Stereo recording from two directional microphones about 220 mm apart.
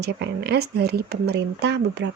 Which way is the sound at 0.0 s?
50° right (ahead or behind).